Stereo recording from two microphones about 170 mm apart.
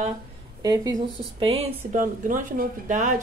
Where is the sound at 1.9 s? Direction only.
50° right (ahead or behind).